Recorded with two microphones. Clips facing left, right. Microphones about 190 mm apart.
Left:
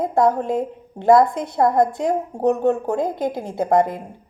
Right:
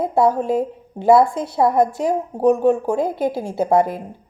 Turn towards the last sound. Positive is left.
turn(degrees=-5)  # may be behind; listen again after turning